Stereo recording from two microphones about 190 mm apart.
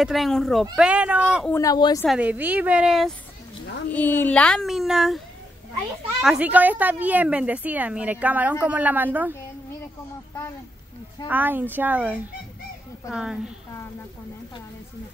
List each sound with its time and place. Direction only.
0.0 s speech: centre (ahead or behind)
1.5 s speech: 20° left (ahead or behind)
2.0 s a woman's voice: 5° right (ahead or behind)
3.9 s speech: 10° left (ahead or behind)
6.2 s a woman's voice: 5° right (ahead or behind)
11.2 s a woman's voice: 10° right (ahead or behind)